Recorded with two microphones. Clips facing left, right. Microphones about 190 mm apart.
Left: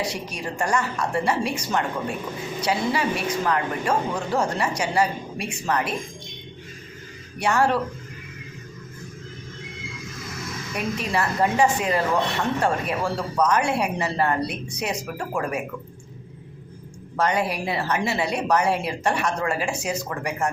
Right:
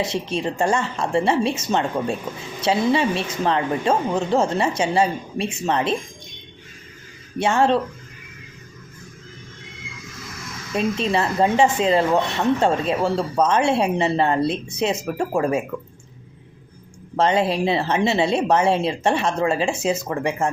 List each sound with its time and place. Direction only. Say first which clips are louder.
0.0 s a woman's voice: right 6 dB; 25° right (ahead or behind)
7.3 s a woman's voice: right 3 dB; 25° right (ahead or behind)
10.8 s a woman's voice: right 5 dB; 25° right (ahead or behind)
17.2 s a woman's voice: right 5 dB; 25° right (ahead or behind)